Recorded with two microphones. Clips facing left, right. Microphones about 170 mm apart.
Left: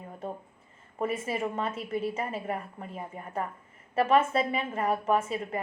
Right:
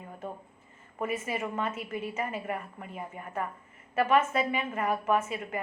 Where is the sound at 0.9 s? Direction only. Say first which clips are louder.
Left 2 dB; 30° left (ahead or behind).